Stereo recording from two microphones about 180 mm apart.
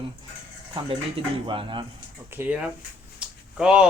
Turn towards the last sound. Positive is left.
turn(degrees=-5)  # may be behind; listen again after turning